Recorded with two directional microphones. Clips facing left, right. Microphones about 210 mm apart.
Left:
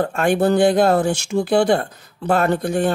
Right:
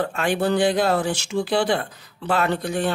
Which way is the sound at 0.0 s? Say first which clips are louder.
Left 5 dB; 45° left (ahead or behind).